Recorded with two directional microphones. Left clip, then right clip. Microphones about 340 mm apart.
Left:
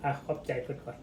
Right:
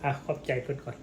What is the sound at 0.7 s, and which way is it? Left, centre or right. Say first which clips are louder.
Speech: right 5 dB; right.